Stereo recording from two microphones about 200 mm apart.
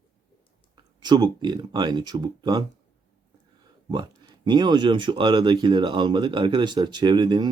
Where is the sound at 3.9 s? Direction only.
20° right (ahead or behind).